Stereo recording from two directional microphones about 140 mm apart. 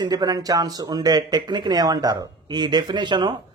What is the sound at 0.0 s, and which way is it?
Speech, 30° right (ahead or behind).